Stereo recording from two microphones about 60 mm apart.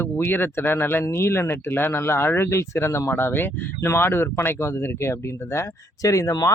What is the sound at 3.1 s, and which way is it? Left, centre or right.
Speech, left.